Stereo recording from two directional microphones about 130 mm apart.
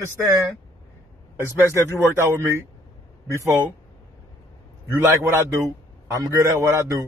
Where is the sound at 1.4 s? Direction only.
20° right (ahead or behind).